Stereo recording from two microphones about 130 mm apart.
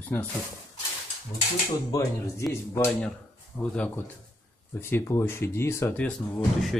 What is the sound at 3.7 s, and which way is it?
Speech, 10° left (ahead or behind).